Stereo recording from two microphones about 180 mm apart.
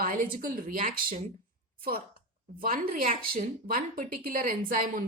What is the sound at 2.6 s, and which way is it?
Speech, 50° right (ahead or behind).